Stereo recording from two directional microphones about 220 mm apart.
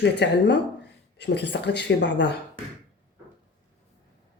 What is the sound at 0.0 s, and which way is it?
Speech, 50° left (ahead or behind).